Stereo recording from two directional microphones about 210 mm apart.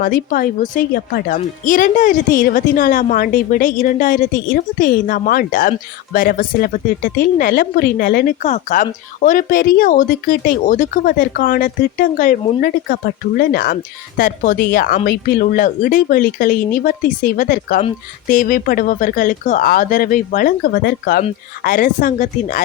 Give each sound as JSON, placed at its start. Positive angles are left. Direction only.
{"t": 0.0, "sound": "speech", "side_deg": 45}